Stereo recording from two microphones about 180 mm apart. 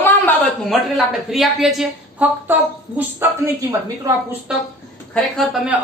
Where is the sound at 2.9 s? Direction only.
10° right (ahead or behind).